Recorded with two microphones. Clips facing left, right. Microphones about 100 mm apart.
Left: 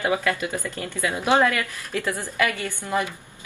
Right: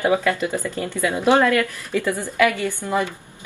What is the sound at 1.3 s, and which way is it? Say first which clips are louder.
Speech: right 4 dB; 15° left (ahead or behind).